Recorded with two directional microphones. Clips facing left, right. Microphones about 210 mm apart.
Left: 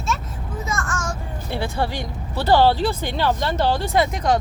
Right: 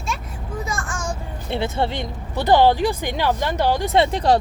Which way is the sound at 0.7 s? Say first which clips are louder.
Left 4 dB; 15° right (ahead or behind).